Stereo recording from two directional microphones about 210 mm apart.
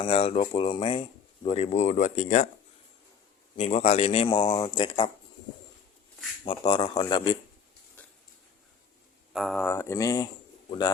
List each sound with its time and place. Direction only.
0.0 s a man's voice: 25° left (ahead or behind)
3.6 s a man's voice: 30° left (ahead or behind)
6.4 s a man's voice: 25° left (ahead or behind)
8.0 s a sound: 5° left (ahead or behind)
9.3 s speech: centre (ahead or behind)
9.6 s a man's voice: 15° left (ahead or behind)